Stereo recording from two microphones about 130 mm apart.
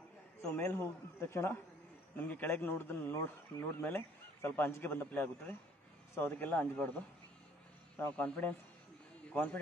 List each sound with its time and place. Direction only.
0.4 s a man's voice: 15° left (ahead or behind)
8.0 s a man's voice: 10° left (ahead or behind)